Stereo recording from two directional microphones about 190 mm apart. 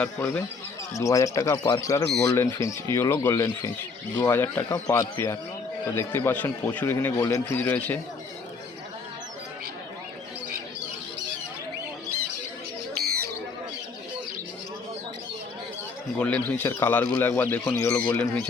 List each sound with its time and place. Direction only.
0.0 s a man's voice: 5° left (ahead or behind)
13.0 s a sound: 55° right (ahead or behind)
16.1 s a man's voice: 5° left (ahead or behind)